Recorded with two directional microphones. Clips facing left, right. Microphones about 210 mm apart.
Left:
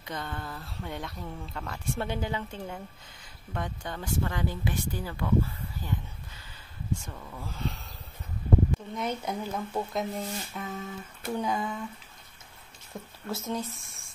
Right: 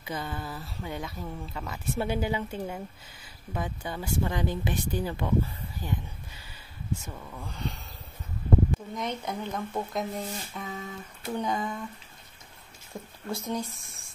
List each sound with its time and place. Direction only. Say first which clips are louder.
0.0 s speech: right 2 dB; 5° right (ahead or behind)
7.0 s speech: right 1 dB; 5° right (ahead or behind)
8.9 s speech: left 1 dB; 5° left (ahead or behind)
12.9 s speech: right 1 dB; centre (ahead or behind)